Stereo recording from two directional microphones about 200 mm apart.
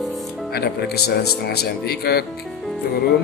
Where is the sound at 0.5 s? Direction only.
50° left (ahead or behind).